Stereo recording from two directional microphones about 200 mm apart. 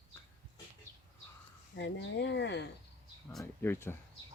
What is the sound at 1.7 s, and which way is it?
Speech, 60° left (ahead or behind).